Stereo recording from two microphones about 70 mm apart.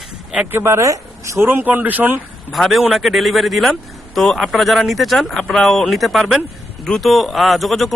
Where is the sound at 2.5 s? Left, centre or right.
Centre.